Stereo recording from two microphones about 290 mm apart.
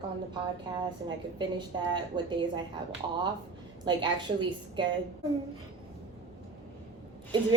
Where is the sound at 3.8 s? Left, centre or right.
Centre.